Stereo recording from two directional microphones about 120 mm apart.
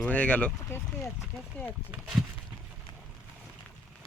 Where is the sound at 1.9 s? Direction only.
5° right (ahead or behind).